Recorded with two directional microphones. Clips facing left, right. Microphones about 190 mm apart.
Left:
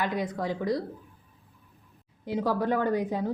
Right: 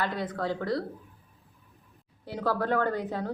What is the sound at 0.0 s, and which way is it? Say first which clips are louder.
Speech: left 1 dB; 15° left (ahead or behind).